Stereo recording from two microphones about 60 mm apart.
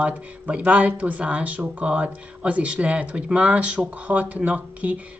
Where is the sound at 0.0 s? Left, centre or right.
Right.